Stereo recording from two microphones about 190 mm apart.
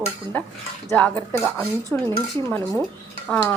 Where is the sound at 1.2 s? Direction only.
15° right (ahead or behind).